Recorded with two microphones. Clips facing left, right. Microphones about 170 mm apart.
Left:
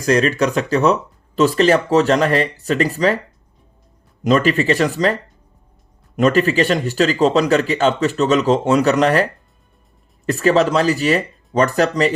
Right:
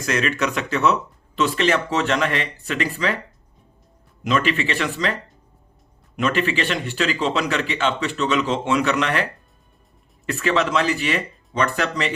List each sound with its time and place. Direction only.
0.0 s speech: 35° left (ahead or behind)
4.2 s speech: 40° left (ahead or behind)
10.2 s speech: 40° left (ahead or behind)